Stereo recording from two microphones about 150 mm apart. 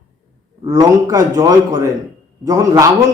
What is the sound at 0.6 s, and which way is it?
A man's voice, 25° right (ahead or behind).